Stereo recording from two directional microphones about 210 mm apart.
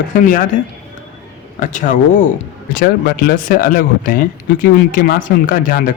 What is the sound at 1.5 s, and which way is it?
Speech, 40° left (ahead or behind).